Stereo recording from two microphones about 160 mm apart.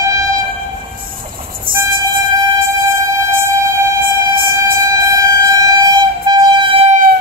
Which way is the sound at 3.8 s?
20° right (ahead or behind).